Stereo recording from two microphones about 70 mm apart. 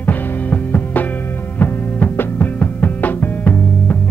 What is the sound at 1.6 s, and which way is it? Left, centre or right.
Music, left.